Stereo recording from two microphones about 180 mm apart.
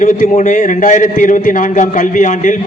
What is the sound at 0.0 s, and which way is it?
A man's voice, 45° left (ahead or behind).